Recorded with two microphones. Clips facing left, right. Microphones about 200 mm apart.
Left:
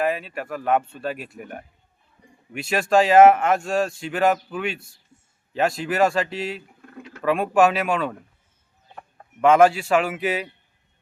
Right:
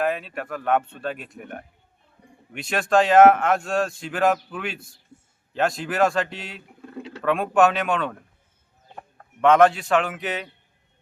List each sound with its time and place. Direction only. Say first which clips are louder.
0.0 s speech: left 1 dB; centre (ahead or behind)
5.1 s a sound: right 7 dB; 35° right (ahead or behind)
5.5 s speech: left 1 dB; 5° left (ahead or behind)
9.4 s a man's voice: left 1 dB; 5° left (ahead or behind)